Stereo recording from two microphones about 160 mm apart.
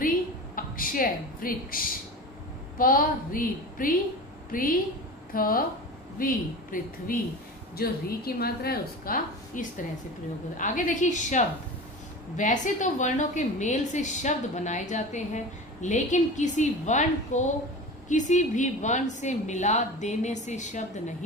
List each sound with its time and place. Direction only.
0.6 s a woman's voice: 60° left (ahead or behind)
2.8 s a woman's voice: 60° left (ahead or behind)
10.6 s a woman's voice: 50° left (ahead or behind)